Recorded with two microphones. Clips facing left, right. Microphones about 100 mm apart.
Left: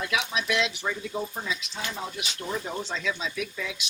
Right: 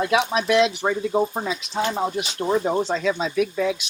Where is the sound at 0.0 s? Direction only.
40° right (ahead or behind).